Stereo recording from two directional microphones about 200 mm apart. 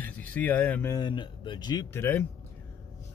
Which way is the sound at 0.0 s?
10° left (ahead or behind).